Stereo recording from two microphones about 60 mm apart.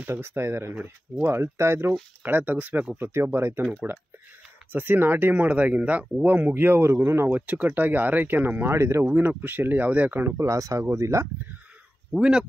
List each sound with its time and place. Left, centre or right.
0.0 s speech: right
2.2 s speech: right
3.0 s speech: right
8.7 s speech: right
9.0 s speech: right
10.4 s speech: right
12.2 s speech: centre